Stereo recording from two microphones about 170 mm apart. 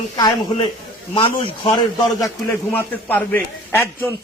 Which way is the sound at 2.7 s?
10° left (ahead or behind).